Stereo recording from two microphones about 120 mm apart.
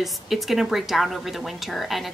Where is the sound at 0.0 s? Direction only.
Centre (ahead or behind).